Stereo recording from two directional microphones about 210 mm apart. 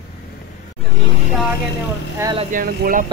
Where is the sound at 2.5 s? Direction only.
45° right (ahead or behind).